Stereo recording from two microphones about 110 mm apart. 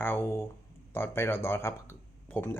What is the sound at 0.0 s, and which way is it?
Speech, 20° left (ahead or behind).